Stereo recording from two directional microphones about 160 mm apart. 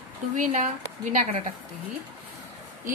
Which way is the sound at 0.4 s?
55° right (ahead or behind).